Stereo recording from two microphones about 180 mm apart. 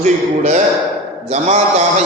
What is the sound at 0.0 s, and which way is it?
Speech, 40° right (ahead or behind).